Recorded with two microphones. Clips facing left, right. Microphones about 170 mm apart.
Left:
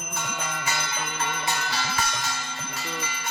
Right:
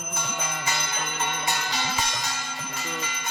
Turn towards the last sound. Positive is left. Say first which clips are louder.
# even
turn(degrees=-15)  # may be behind; listen again after turning